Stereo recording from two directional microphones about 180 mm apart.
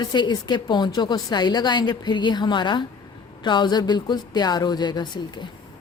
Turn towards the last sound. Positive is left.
turn(degrees=25)  # may be behind; listen again after turning